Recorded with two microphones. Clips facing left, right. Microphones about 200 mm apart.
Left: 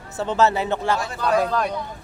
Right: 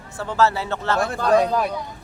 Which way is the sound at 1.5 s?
10° right (ahead or behind).